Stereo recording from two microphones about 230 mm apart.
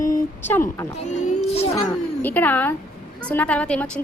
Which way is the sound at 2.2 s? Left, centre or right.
Centre.